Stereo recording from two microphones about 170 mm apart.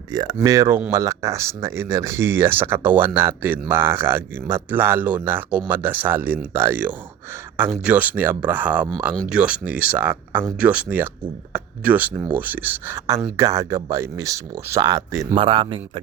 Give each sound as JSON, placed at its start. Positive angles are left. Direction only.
{"t": 0.1, "sound": "speech", "side_deg": -20}
{"t": 15.4, "sound": "a man's voice", "side_deg": -30}